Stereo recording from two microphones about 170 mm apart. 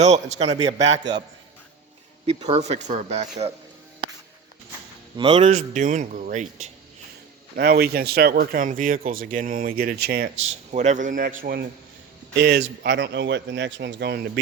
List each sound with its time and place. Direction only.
0.3 s speech: 40° right (ahead or behind)
0.8 s a man's voice: 90° right
2.4 s speech: 40° right (ahead or behind)
5.1 s speech: 30° right (ahead or behind)
5.5 s speech: 45° right (ahead or behind)
7.5 s speech: 70° right (ahead or behind)
10.7 s speech: 45° right (ahead or behind)
12.4 s a man's voice: 75° right (ahead or behind)